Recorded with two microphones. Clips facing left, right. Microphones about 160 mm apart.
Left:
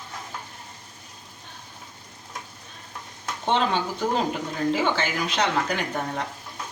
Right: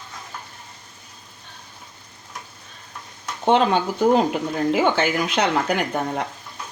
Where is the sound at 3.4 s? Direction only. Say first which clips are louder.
Right 6 dB; 50° right (ahead or behind).